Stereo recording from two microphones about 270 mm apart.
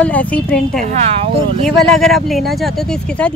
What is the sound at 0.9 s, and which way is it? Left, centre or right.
Speech, right.